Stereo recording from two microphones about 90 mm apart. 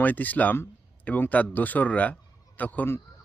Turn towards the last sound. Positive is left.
turn(degrees=20)  # may be behind; listen again after turning